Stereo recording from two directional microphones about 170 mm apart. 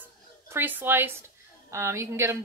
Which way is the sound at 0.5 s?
10° right (ahead or behind).